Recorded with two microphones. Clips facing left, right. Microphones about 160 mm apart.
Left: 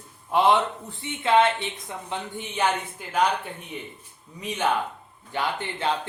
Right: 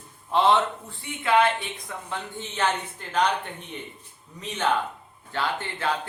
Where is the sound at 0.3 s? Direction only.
10° left (ahead or behind).